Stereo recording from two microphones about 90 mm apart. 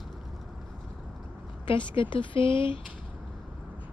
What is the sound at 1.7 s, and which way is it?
A woman's voice, 70° left (ahead or behind).